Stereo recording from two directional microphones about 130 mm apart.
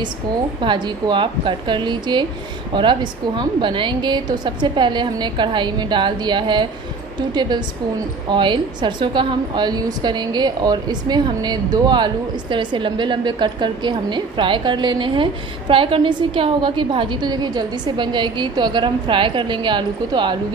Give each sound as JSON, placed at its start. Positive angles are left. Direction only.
{"t": 0.6, "sound": "a woman's voice", "side_deg": -35}